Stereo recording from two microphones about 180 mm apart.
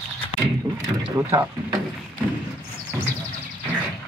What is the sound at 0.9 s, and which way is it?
Vehicle, 20° right (ahead or behind).